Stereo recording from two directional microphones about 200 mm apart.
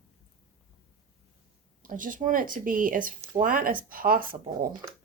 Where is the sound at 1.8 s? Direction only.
40° right (ahead or behind).